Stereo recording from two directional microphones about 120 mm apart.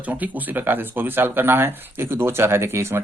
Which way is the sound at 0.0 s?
15° right (ahead or behind).